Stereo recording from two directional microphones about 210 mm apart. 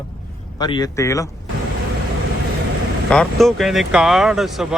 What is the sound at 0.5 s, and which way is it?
Speech, 20° left (ahead or behind).